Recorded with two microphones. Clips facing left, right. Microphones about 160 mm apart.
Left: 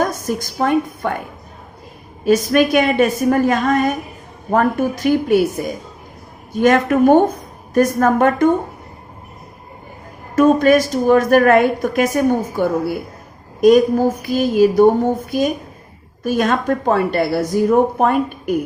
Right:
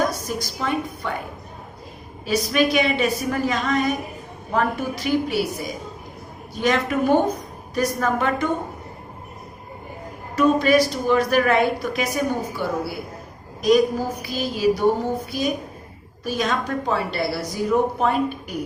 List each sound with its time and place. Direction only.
0.0 s a woman's voice: 50° left (ahead or behind)
2.2 s a woman's voice: 50° left (ahead or behind)
6.5 s a woman's voice: 50° left (ahead or behind)
10.3 s a woman's voice: 50° left (ahead or behind)